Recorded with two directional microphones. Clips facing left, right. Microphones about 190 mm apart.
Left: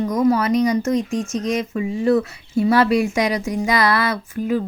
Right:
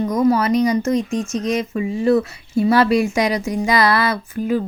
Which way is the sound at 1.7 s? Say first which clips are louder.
Right 1 dB; 25° right (ahead or behind).